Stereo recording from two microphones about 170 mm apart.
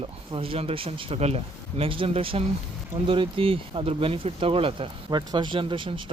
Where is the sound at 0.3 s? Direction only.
35° right (ahead or behind).